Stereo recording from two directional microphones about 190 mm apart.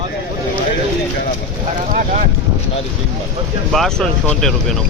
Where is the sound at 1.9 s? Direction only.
40° right (ahead or behind).